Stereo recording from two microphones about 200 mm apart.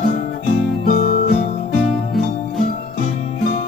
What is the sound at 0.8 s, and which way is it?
Music, 45° left (ahead or behind).